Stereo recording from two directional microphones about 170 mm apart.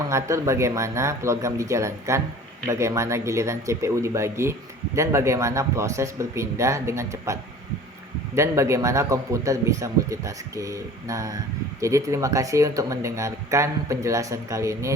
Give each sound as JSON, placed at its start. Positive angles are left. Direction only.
{"t": 0.0, "sound": "speech", "side_deg": -15}
{"t": 8.4, "sound": "a man's voice", "side_deg": -15}